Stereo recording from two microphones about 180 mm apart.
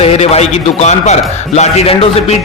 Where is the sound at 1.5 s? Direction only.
35° left (ahead or behind).